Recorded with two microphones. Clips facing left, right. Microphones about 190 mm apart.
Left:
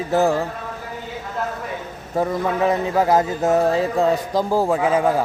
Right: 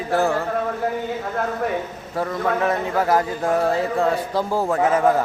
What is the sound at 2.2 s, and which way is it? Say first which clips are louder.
Speech: left 2 dB; 20° left (ahead or behind).